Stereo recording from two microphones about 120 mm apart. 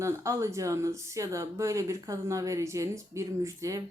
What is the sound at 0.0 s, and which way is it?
A woman's voice, 25° right (ahead or behind).